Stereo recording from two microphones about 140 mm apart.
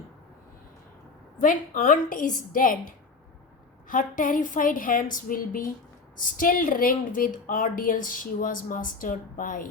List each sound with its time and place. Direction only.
1.4 s a woman's voice: 70° left (ahead or behind)
3.8 s a woman's voice: 70° left (ahead or behind)